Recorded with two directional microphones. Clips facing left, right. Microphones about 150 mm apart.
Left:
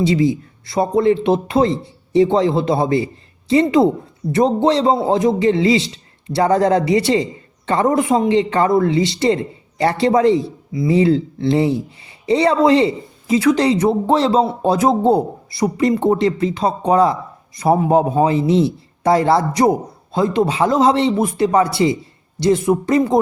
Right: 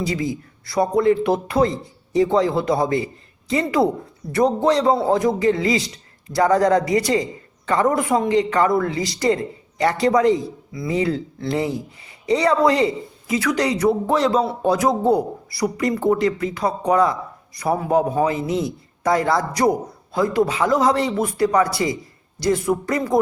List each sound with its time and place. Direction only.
0.0 s speech: 25° left (ahead or behind)